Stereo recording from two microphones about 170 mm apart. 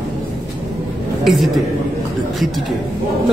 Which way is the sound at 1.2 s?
Centre (ahead or behind).